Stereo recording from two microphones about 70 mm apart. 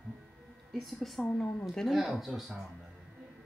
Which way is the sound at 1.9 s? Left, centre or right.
Centre.